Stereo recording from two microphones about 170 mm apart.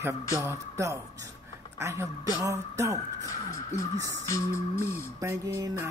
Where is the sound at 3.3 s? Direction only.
20° left (ahead or behind).